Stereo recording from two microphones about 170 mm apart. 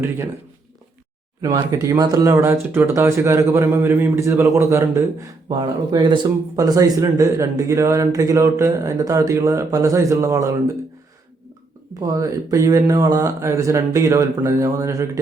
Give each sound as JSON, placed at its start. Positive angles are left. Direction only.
{"t": 1.4, "sound": "speech", "side_deg": -20}
{"t": 5.5, "sound": "a man's voice", "side_deg": -25}
{"t": 11.9, "sound": "a man's voice", "side_deg": -20}